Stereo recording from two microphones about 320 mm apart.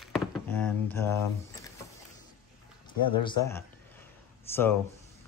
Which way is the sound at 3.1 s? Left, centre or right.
Centre.